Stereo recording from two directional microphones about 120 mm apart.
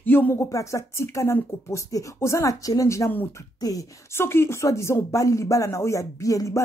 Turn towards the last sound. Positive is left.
turn(degrees=30)  # may be behind; listen again after turning